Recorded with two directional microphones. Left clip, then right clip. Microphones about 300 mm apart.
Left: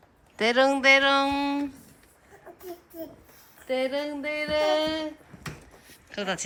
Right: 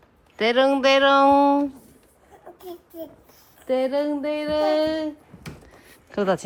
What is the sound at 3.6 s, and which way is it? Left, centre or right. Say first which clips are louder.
Speech: right 5 dB; centre.